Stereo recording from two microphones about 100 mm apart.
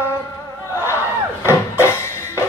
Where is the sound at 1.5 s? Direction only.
25° left (ahead or behind).